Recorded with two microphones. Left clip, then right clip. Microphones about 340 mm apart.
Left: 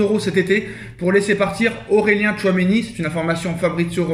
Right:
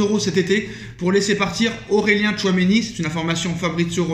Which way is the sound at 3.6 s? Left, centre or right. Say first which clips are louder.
Left 4 dB; centre.